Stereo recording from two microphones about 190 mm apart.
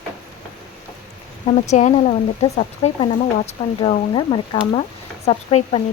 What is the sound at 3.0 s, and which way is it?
Speech, 30° left (ahead or behind).